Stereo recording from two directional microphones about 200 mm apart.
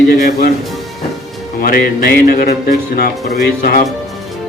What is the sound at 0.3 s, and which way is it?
Speech, 45° left (ahead or behind).